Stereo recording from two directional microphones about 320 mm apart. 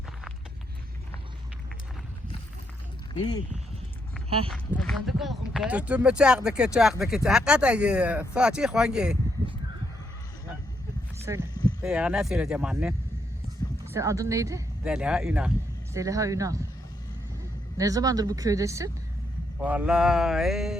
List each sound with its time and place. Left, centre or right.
4.4 s speech: centre
11.3 s speech: centre
17.7 s speech: centre